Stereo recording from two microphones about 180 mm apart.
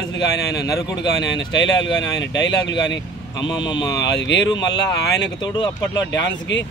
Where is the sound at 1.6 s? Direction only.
90° left.